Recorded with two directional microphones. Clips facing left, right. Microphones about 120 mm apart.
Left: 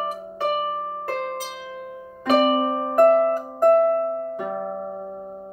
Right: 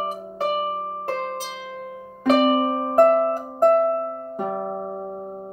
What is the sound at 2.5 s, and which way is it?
Music, 30° right (ahead or behind).